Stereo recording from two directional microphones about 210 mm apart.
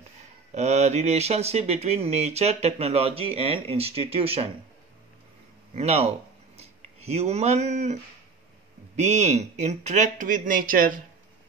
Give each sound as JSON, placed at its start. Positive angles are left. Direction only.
{"t": 0.6, "sound": "speech", "side_deg": -30}
{"t": 5.8, "sound": "speech", "side_deg": -30}